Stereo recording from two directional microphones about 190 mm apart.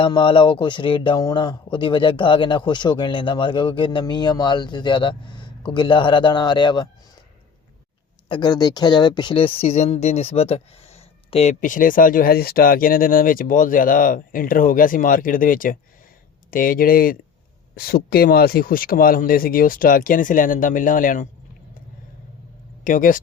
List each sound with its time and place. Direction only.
0.0 s speech: 25° left (ahead or behind)
8.3 s speech: 20° left (ahead or behind); by 21.2 s 45° left (ahead or behind)
22.8 s speech: 45° left (ahead or behind)